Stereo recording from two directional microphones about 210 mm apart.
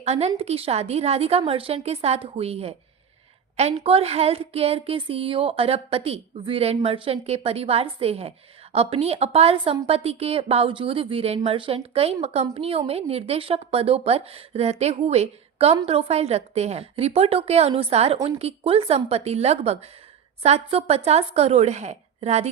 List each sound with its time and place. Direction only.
0.0 s a woman's voice: 30° right (ahead or behind)